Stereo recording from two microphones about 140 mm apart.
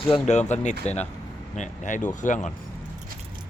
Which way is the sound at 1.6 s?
65° left (ahead or behind).